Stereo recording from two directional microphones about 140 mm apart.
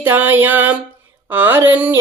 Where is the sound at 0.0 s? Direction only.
15° right (ahead or behind).